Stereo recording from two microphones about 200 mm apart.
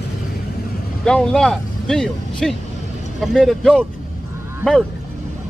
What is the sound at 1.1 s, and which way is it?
Speech, 5° left (ahead or behind).